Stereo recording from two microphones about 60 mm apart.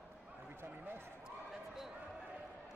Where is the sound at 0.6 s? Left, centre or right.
Right.